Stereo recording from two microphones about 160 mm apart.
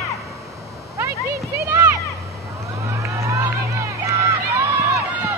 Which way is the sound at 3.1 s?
20° right (ahead or behind).